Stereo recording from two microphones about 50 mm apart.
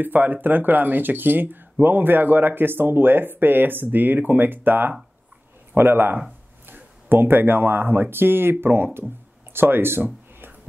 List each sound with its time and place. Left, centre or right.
0.0 s speech: right